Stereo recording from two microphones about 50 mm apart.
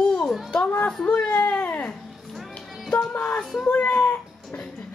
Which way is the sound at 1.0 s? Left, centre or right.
Left.